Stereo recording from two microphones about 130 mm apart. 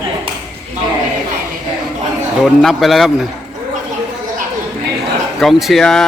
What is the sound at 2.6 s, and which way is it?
Speech, centre (ahead or behind).